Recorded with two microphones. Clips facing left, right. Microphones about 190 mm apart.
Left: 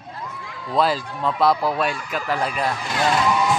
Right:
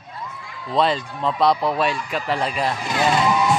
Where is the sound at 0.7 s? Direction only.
5° left (ahead or behind).